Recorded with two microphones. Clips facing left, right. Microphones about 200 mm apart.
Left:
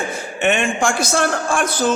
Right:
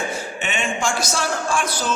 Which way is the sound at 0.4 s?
55° left (ahead or behind).